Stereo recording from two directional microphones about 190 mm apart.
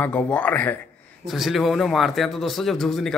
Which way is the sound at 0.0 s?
5° left (ahead or behind).